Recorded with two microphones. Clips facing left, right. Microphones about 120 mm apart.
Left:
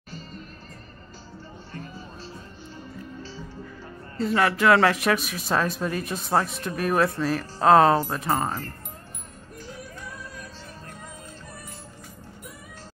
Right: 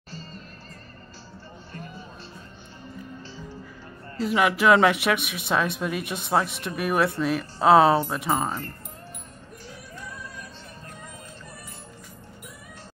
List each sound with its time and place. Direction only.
4.3 s speech: 10° right (ahead or behind)
5.0 s speech: centre (ahead or behind)
6.4 s speech: 30° left (ahead or behind)
6.7 s speech: 5° right (ahead or behind)